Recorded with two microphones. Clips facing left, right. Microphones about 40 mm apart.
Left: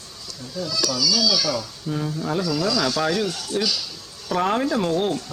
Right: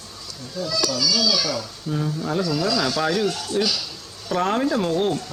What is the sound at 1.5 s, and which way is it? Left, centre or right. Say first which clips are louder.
Speech: left 1 dB; centre.